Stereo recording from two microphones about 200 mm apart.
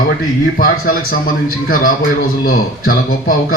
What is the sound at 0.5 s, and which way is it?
A man's voice, 45° left (ahead or behind).